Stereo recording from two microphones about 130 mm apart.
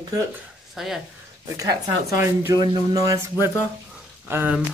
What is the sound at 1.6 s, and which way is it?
Speech, 25° right (ahead or behind).